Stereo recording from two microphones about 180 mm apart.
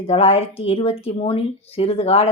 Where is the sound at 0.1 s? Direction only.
30° left (ahead or behind).